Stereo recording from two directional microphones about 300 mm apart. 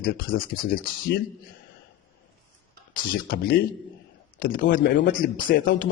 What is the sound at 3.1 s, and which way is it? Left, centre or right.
A man's voice, left.